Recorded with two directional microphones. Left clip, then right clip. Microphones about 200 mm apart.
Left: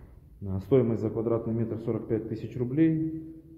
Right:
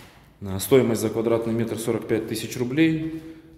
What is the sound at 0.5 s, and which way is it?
Speech, 20° right (ahead or behind).